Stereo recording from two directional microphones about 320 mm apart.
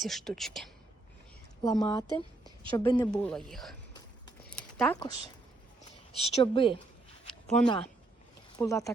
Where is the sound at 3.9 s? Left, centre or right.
Centre.